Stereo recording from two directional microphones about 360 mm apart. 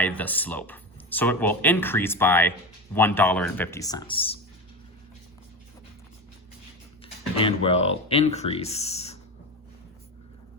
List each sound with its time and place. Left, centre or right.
0.0 s speech: centre
7.0 s speech: centre